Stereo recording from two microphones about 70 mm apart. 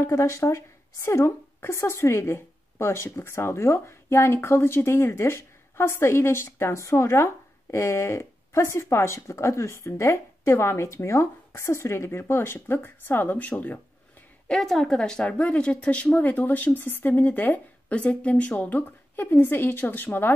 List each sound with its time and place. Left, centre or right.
0.0 s a woman's voice: left
14.5 s a woman's voice: centre; by 20.3 s left